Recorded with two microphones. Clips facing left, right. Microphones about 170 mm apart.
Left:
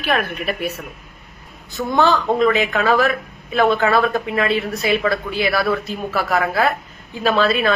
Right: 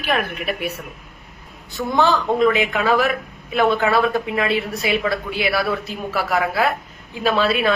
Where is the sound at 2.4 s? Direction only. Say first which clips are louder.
Even; 10° right (ahead or behind).